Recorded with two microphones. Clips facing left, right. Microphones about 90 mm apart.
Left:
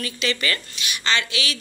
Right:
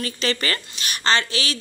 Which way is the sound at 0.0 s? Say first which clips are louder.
Right 1 dB; 35° right (ahead or behind).